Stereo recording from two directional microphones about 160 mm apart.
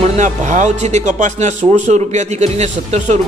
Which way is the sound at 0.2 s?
50° right (ahead or behind).